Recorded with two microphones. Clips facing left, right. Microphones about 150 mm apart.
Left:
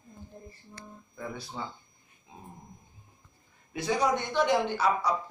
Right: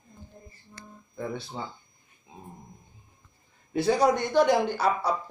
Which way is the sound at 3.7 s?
35° right (ahead or behind).